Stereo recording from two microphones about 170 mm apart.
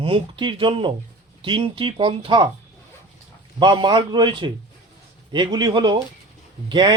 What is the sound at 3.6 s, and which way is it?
Speech, 25° right (ahead or behind).